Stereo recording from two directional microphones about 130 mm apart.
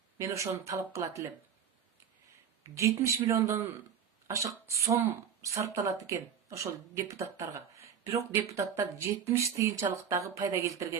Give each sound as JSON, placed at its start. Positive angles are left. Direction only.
{"t": 0.2, "sound": "speech", "side_deg": -25}
{"t": 2.7, "sound": "speech", "side_deg": -25}